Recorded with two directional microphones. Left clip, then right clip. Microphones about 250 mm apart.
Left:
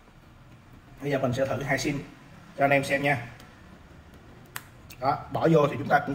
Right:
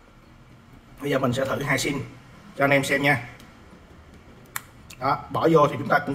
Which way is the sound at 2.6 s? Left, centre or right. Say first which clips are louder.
Right 3 dB; centre.